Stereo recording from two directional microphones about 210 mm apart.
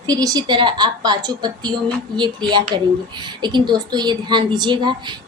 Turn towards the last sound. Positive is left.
turn(degrees=-20)  # may be behind; listen again after turning